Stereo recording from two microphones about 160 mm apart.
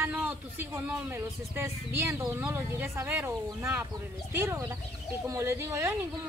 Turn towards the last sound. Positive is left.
turn(degrees=-15)  # may be behind; listen again after turning